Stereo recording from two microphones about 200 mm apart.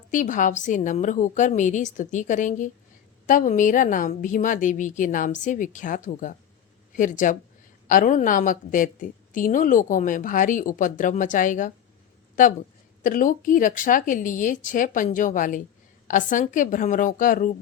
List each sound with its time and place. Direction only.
0.1 s a woman's voice: 40° left (ahead or behind)
13.0 s a woman's voice: 40° left (ahead or behind)